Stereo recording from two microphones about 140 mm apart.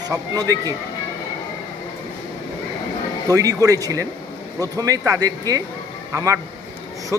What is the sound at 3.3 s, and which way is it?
A man's voice, 25° right (ahead or behind).